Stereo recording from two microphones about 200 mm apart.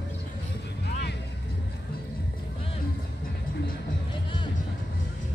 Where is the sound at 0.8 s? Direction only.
55° left (ahead or behind).